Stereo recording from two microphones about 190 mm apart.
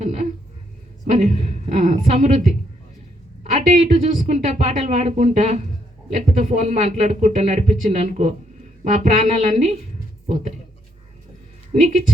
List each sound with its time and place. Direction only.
0.0 s a sound: 35° right (ahead or behind)
1.1 s speech: 40° right (ahead or behind)
11.7 s speech: 35° right (ahead or behind)